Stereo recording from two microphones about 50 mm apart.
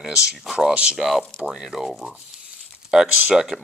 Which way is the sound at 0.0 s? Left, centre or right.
Centre.